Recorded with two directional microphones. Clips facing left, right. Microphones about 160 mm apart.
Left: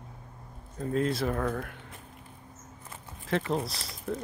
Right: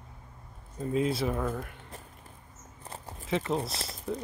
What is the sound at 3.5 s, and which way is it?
Speech, centre (ahead or behind).